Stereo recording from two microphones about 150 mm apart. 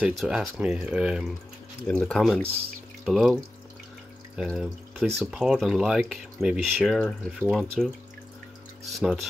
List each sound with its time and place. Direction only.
0.0 s speech: 5° right (ahead or behind)